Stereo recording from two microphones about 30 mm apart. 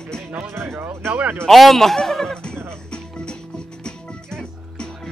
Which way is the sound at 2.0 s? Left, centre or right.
Centre.